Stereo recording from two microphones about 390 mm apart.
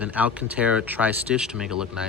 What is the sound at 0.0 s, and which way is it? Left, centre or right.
Speech, centre.